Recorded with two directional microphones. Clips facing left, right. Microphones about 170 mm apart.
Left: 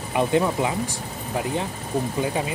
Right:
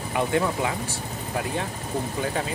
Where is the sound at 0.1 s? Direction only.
20° left (ahead or behind).